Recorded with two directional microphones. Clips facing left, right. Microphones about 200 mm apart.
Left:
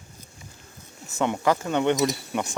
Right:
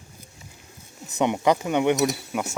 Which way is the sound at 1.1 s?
20° right (ahead or behind).